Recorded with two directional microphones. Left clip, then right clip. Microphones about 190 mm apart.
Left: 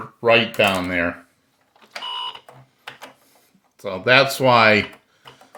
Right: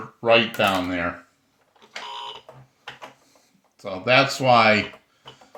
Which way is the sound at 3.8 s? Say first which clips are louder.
Left 3 dB; 50° left (ahead or behind).